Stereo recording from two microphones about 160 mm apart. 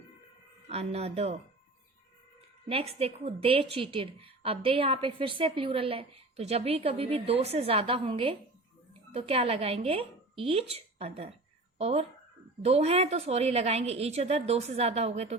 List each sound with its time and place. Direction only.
0.7 s a woman's voice: 40° right (ahead or behind)
2.6 s a woman's voice: 35° right (ahead or behind)